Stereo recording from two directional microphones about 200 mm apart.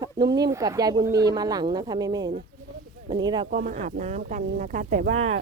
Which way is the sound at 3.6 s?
35° right (ahead or behind).